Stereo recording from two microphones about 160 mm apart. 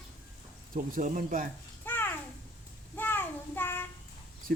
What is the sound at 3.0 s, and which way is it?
Child singing, 15° left (ahead or behind).